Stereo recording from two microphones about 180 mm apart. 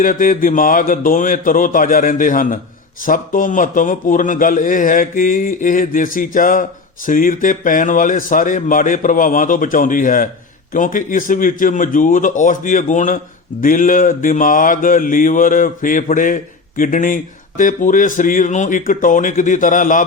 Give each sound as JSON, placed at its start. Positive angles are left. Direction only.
{"t": 0.0, "sound": "a man's voice", "side_deg": 50}